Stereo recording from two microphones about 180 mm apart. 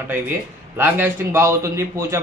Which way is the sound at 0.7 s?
10° right (ahead or behind).